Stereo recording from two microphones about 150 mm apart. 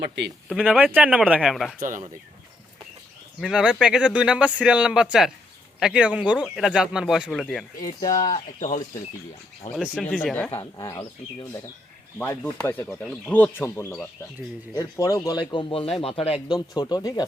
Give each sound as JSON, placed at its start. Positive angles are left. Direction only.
{"t": 0.5, "sound": "speech", "side_deg": -10}
{"t": 1.8, "sound": "speech", "side_deg": -60}
{"t": 3.4, "sound": "speech", "side_deg": -5}
{"t": 8.1, "sound": "speech", "side_deg": 55}
{"t": 9.7, "sound": "speech", "side_deg": -5}
{"t": 10.6, "sound": "speech", "side_deg": 25}
{"t": 16.8, "sound": "speech", "side_deg": 25}